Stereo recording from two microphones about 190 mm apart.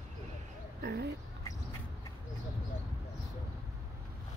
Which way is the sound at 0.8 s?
60° right (ahead or behind).